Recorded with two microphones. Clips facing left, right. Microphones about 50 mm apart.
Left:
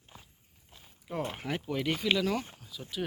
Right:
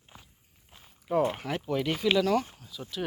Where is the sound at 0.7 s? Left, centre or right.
Centre.